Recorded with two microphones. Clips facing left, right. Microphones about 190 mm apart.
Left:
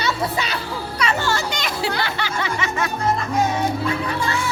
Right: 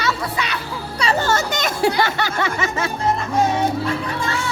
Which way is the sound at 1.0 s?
35° right (ahead or behind).